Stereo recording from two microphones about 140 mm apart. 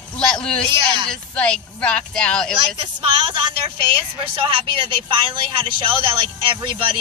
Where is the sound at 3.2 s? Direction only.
35° right (ahead or behind).